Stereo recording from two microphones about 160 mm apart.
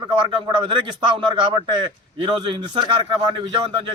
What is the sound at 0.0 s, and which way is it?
Speech, 35° right (ahead or behind).